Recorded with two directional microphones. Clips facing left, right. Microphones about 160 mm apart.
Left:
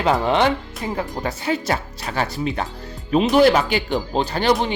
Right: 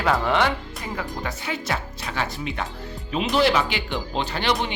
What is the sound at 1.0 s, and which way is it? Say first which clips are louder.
Speech: left 3 dB; 35° left (ahead or behind).